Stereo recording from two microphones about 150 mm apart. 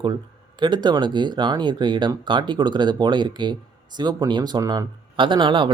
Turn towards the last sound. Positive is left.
turn(degrees=-30)  # may be behind; listen again after turning